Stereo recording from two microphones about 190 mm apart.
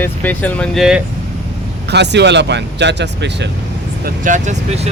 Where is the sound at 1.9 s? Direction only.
65° right (ahead or behind).